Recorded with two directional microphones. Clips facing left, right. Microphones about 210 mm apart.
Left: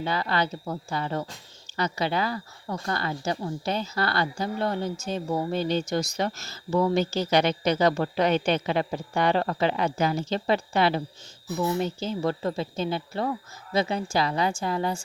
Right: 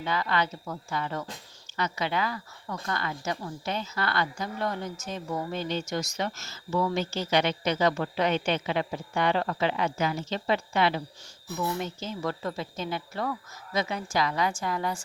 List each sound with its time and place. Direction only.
0.0 s a woman's voice: 35° left (ahead or behind)